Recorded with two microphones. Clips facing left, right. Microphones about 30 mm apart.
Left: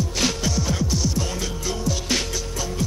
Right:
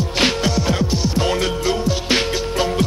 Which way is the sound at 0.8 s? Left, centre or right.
Right.